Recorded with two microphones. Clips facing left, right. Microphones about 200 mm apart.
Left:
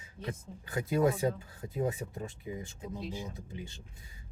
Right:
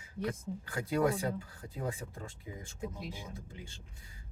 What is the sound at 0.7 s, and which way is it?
Speech, 20° left (ahead or behind).